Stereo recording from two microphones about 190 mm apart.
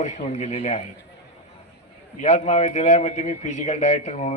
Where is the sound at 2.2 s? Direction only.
35° left (ahead or behind).